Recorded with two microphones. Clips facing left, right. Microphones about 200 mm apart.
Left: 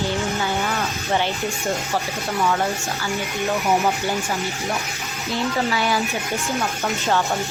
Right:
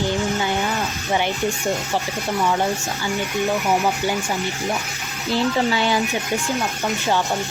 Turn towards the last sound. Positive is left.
turn(degrees=-25)  # may be behind; listen again after turning